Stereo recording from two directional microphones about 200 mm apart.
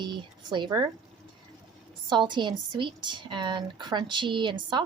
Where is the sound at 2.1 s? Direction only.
25° right (ahead or behind).